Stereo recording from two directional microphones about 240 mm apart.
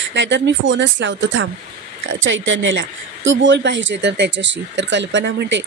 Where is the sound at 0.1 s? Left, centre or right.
Right.